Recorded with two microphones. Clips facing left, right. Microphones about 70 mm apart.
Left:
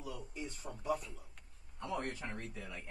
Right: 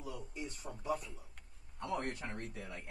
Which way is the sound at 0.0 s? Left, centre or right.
Centre.